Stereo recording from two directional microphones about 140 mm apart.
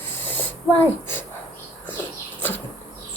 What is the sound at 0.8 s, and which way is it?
Speech, 15° left (ahead or behind).